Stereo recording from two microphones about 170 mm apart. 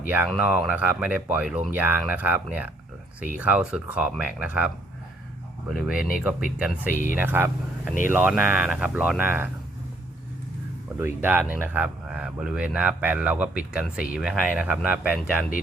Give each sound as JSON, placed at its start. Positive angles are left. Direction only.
{"t": 0.0, "sound": "speech", "side_deg": -10}
{"t": 5.7, "sound": "speech", "side_deg": -5}
{"t": 7.2, "sound": "speech", "side_deg": -10}
{"t": 10.9, "sound": "speech", "side_deg": -15}